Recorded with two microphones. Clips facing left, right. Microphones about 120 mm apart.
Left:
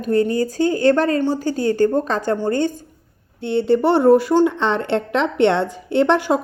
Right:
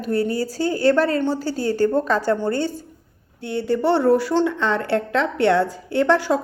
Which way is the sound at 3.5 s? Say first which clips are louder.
Left 4 dB; 25° left (ahead or behind).